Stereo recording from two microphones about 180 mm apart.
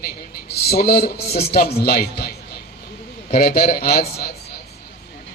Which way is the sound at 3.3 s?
55° left (ahead or behind).